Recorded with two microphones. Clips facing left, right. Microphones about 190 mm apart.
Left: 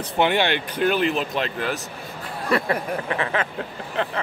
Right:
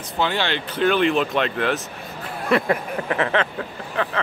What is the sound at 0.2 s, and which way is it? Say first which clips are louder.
Speech: left 3 dB; 15° left (ahead or behind).